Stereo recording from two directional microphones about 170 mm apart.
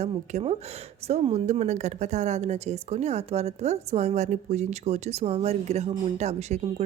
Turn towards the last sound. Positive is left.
turn(degrees=-40)  # may be behind; listen again after turning